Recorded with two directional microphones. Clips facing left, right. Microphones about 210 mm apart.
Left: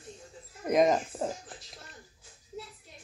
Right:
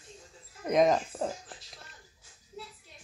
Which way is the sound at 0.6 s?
Centre (ahead or behind).